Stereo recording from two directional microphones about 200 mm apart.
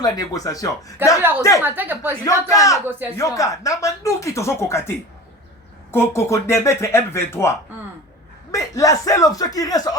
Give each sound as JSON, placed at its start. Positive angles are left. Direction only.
{"t": 0.0, "sound": "speech", "side_deg": 20}
{"t": 1.6, "sound": "speech", "side_deg": -10}
{"t": 2.2, "sound": "speech", "side_deg": 15}
{"t": 8.5, "sound": "speech", "side_deg": 15}